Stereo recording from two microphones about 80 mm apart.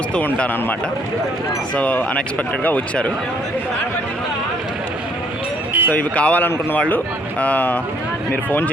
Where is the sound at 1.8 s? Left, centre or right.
Centre.